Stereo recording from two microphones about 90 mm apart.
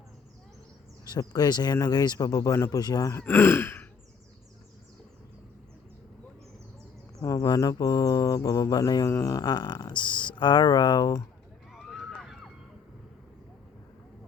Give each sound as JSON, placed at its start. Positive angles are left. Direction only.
{"t": 1.0, "sound": "speech", "side_deg": 50}
{"t": 3.1, "sound": "sigh", "side_deg": 25}
{"t": 7.2, "sound": "speech", "side_deg": 50}
{"t": 9.0, "sound": "speech", "side_deg": 35}
{"t": 11.7, "sound": "a sound", "side_deg": 0}